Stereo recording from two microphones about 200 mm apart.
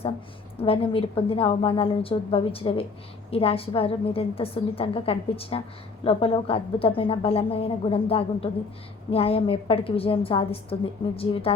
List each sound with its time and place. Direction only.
0.6 s a woman's voice: 30° left (ahead or behind)